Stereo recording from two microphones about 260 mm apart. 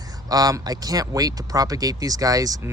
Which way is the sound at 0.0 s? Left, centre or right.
Centre.